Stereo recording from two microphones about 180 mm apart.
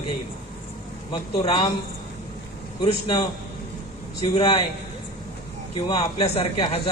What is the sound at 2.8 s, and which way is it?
Speech, 30° left (ahead or behind).